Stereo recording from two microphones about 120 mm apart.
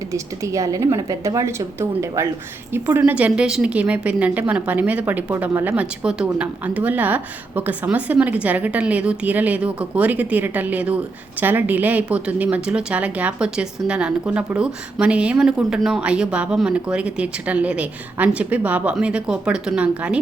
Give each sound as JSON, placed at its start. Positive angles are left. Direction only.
{"t": 0.1, "sound": "a woman's voice", "side_deg": -25}